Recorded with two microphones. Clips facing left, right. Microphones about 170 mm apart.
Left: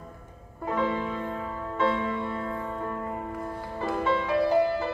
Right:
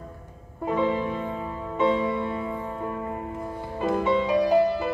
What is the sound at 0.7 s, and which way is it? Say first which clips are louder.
Music: right 3 dB; 15° right (ahead or behind).